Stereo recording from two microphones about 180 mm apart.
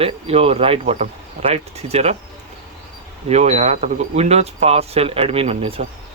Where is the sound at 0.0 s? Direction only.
35° right (ahead or behind).